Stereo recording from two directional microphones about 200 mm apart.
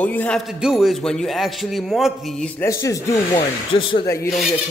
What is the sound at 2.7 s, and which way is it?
Speech, 15° left (ahead or behind).